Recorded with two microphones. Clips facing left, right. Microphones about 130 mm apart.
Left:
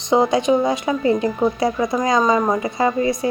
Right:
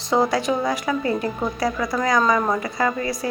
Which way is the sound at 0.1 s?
20° left (ahead or behind).